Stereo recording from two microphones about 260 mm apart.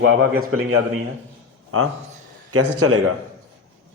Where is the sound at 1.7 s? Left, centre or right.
Right.